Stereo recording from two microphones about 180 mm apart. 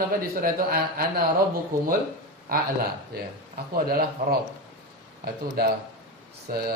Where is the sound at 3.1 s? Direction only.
60° right (ahead or behind).